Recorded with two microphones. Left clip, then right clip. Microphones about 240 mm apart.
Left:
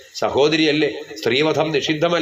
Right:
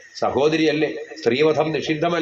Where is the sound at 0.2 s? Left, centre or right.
Left.